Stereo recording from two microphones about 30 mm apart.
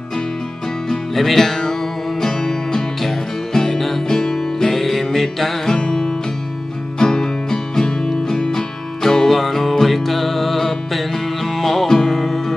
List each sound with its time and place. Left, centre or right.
1.1 s music: centre
4.1 s music: centre
4.4 s music: centre
5.7 s music: left